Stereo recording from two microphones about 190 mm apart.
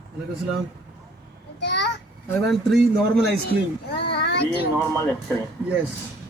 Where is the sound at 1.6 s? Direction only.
60° left (ahead or behind).